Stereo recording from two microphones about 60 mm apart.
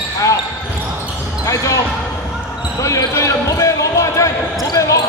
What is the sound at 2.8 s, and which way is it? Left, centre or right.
Basketball bounce, left.